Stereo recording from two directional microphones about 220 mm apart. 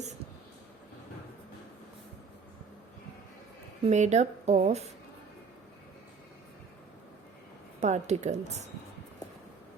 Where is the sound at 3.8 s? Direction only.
30° right (ahead or behind).